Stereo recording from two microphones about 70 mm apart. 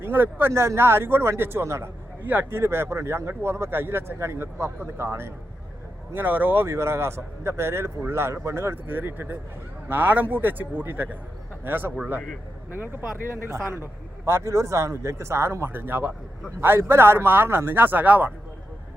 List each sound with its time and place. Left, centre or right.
0.0 s speech: right
2.2 s a man's voice: right